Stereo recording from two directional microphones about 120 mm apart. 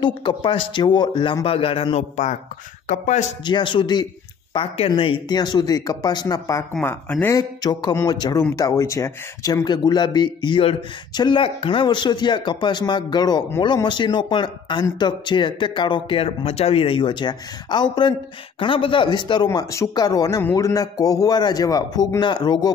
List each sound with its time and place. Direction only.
0.0 s speech: 40° left (ahead or behind)
2.9 s speech: 90° left
3.4 s speech: 40° left (ahead or behind)
4.6 s speech: 50° left (ahead or behind); by 6.6 s 30° left (ahead or behind)
6.8 s speech: 15° left (ahead or behind)
7.3 s speech: 35° left (ahead or behind)